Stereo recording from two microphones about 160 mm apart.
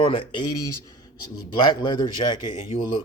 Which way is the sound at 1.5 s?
30° left (ahead or behind).